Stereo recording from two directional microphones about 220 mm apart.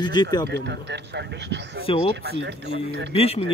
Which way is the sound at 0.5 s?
50° right (ahead or behind).